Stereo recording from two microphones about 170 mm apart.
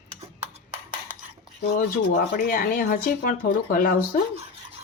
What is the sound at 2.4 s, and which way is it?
Speech, 55° left (ahead or behind).